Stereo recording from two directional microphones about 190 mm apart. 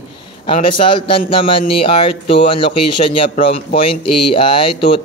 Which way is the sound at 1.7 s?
30° left (ahead or behind).